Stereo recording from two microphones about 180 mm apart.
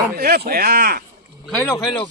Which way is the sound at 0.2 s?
55° right (ahead or behind).